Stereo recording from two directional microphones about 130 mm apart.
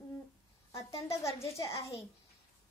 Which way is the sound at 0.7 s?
25° left (ahead or behind).